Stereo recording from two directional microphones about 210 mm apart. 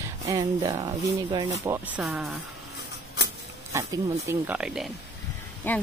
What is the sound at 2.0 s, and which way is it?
Speech, centre (ahead or behind).